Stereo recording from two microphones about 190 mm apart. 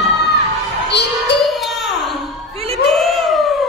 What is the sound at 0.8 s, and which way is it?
Music, 60° left (ahead or behind).